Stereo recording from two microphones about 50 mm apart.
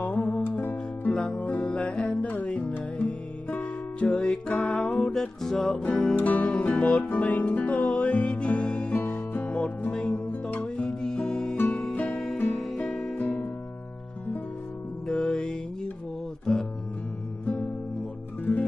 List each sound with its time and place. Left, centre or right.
0.0 s music: left
0.5 s music: left
1.0 s music: left
4.1 s music: left
5.8 s music: centre
6.1 s music: left
8.9 s music: left
9.5 s music: left
11.9 s music: left
13.2 s music: left
15.0 s music: centre
16.5 s guitar: centre
18.4 s music: left